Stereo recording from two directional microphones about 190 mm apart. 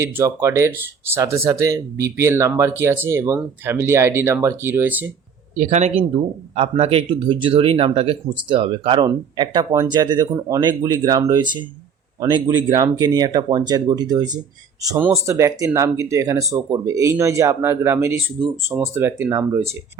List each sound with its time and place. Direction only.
0.0 s speech: 15° right (ahead or behind)
5.5 s speech: 35° right (ahead or behind); by 19.6 s 15° right (ahead or behind)